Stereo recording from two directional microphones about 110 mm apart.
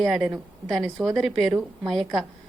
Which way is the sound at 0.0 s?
Centre (ahead or behind).